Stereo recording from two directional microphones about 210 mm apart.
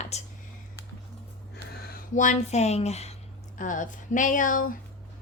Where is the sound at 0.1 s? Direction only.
30° left (ahead or behind).